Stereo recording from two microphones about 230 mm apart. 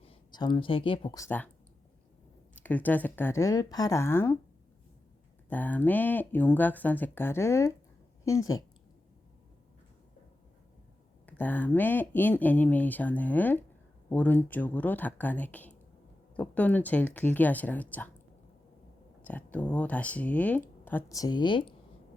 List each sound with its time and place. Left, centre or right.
0.0 s speech: left
2.6 s speech: centre
5.5 s speech: centre
11.3 s speech: centre
19.2 s speech: centre